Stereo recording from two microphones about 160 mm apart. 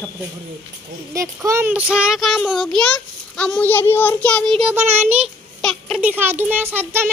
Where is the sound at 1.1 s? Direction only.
20° right (ahead or behind).